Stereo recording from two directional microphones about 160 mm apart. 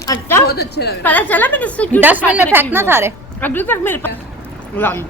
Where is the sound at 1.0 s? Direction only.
10° left (ahead or behind).